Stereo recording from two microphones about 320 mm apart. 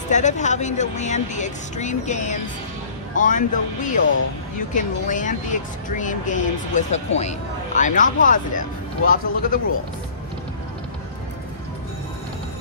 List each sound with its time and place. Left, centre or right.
0.1 s speech: left